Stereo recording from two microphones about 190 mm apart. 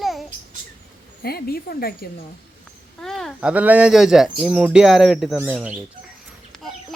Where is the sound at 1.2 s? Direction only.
55° left (ahead or behind).